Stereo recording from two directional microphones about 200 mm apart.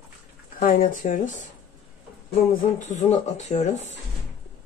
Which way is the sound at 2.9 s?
35° left (ahead or behind).